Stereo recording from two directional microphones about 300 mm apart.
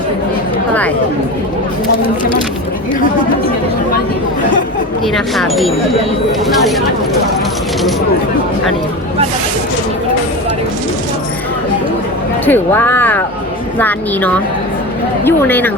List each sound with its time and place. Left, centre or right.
5.1 s speech: centre
12.5 s speech: centre